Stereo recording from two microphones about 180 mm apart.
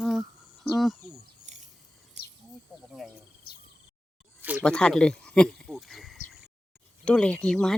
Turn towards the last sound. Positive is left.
turn(degrees=5)  # may be behind; listen again after turning